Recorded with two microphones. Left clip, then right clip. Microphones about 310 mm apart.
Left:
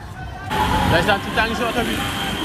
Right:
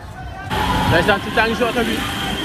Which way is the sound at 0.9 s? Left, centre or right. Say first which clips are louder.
Right 4 dB; centre.